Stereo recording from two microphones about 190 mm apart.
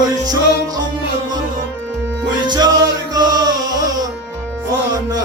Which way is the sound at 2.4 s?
25° right (ahead or behind).